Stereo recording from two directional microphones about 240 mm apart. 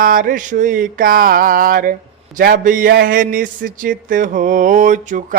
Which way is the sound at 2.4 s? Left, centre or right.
Right.